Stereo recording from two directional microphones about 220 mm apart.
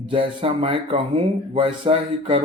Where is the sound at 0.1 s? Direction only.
25° right (ahead or behind).